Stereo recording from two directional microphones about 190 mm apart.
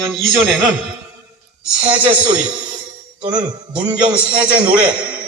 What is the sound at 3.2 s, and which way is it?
Jingle bell, 25° right (ahead or behind).